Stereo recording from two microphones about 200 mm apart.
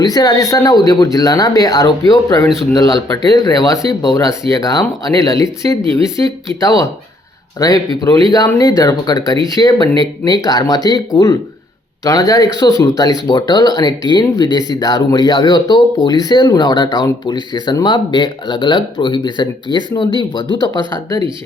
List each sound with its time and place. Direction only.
0.0 s speech: 20° left (ahead or behind)
2.5 s speech: centre (ahead or behind)
2.7 s speech: 20° left (ahead or behind)
6.6 s speech: 15° left (ahead or behind)